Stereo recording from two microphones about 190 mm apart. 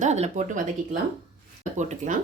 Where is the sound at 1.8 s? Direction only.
40° right (ahead or behind).